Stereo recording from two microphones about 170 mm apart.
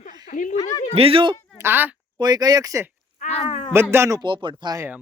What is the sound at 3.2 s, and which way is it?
Speech, 35° left (ahead or behind).